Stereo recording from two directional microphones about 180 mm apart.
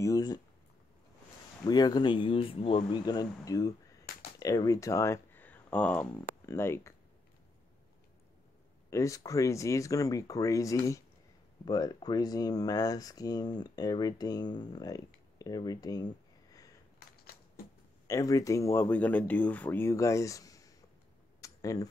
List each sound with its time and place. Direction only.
0.0 s speech: 20° left (ahead or behind)
1.6 s speech: 20° left (ahead or behind)
8.9 s speech: 15° left (ahead or behind)
18.0 s speech: 20° left (ahead or behind)
21.4 s a sound: 20° left (ahead or behind)